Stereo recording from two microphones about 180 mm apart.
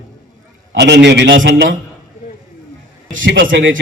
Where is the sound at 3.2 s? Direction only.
90° right.